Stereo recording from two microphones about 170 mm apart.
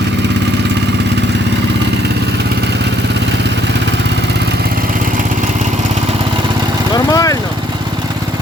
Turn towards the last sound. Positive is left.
turn(degrees=20)  # may be behind; listen again after turning